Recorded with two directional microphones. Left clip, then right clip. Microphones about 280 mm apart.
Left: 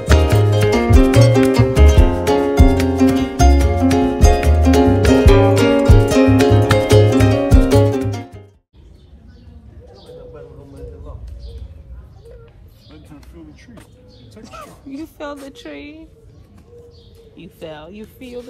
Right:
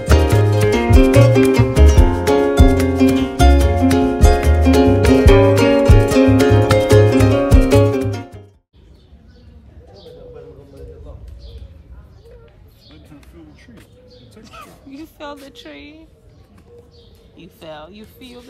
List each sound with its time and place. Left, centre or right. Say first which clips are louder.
0.0 s music: even; centre
14.4 s a sound: left 4 dB; centre
15.4 s a woman's voice: left 3 dB; centre
17.4 s speech: left 1 dB; centre